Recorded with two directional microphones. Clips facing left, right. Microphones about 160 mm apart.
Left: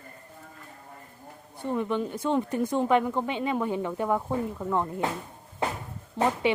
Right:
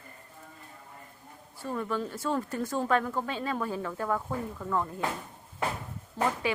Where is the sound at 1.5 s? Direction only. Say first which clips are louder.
Left 4 dB; 20° left (ahead or behind).